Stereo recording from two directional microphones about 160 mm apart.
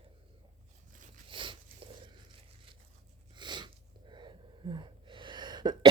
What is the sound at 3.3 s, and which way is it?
Wheeze, 30° right (ahead or behind).